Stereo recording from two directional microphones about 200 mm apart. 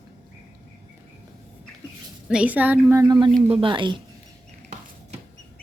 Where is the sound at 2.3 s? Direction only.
5° right (ahead or behind); by 4.0 s 25° right (ahead or behind).